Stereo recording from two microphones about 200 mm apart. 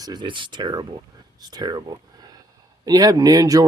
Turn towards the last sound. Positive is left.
turn(degrees=-20)  # may be behind; listen again after turning